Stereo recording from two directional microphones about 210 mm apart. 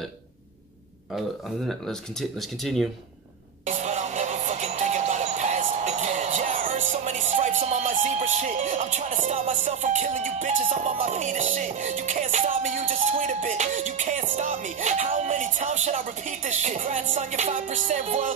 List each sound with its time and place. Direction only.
1.7 s speech: centre (ahead or behind)
3.6 s music: 35° right (ahead or behind)